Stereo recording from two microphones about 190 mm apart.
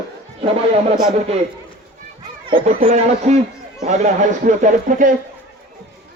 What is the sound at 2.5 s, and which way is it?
Speech, 25° right (ahead or behind).